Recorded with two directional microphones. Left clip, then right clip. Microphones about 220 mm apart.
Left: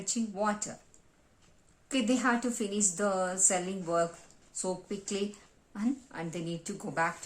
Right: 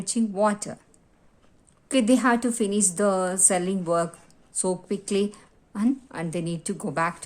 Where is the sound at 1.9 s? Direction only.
40° right (ahead or behind).